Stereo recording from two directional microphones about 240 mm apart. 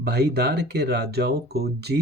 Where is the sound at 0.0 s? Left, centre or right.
Right.